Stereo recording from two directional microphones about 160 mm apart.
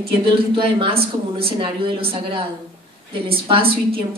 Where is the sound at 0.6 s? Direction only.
35° right (ahead or behind).